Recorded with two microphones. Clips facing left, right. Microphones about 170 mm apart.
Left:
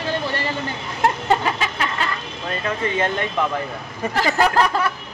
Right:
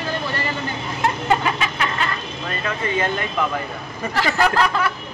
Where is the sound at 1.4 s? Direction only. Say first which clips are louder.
Even; 35° left (ahead or behind).